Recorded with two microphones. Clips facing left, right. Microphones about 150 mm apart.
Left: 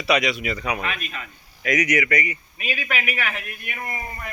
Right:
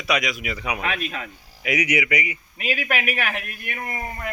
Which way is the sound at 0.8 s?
90° right.